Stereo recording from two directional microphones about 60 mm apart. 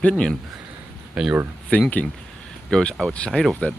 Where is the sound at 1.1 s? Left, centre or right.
Centre.